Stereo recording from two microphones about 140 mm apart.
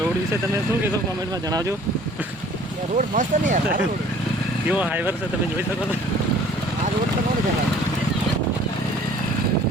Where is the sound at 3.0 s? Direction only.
65° right (ahead or behind).